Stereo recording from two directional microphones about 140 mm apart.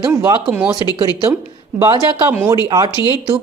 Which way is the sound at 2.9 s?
30° left (ahead or behind).